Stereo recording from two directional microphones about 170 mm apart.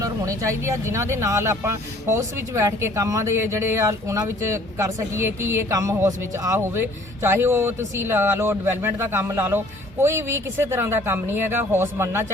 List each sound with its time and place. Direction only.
0.0 s speech: 20° right (ahead or behind)